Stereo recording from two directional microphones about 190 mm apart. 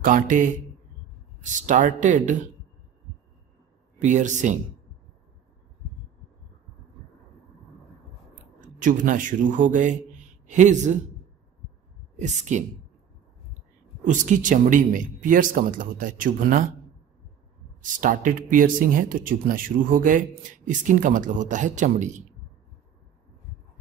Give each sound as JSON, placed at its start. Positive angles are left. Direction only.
{"t": 0.0, "sound": "speech", "side_deg": -45}
{"t": 4.0, "sound": "speech", "side_deg": -40}
{"t": 8.5, "sound": "speech", "side_deg": -45}
{"t": 12.2, "sound": "speech", "side_deg": -40}
{"t": 14.0, "sound": "speech", "side_deg": -40}
{"t": 17.8, "sound": "speech", "side_deg": -45}